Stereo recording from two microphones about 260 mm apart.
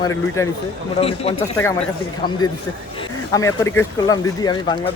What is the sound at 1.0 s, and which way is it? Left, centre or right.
Speech, left.